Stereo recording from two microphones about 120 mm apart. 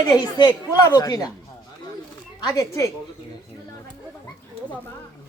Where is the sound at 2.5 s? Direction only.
25° left (ahead or behind).